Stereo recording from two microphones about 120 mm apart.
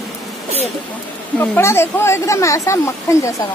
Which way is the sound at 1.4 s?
20° left (ahead or behind).